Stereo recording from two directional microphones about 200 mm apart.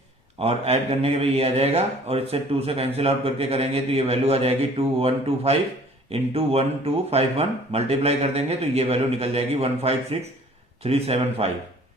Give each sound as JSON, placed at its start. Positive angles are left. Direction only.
{"t": 0.3, "sound": "speech", "side_deg": -30}